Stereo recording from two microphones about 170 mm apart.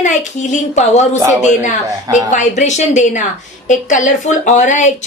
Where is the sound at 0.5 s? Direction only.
45° left (ahead or behind).